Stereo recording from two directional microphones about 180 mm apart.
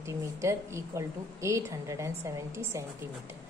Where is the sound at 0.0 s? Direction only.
15° right (ahead or behind).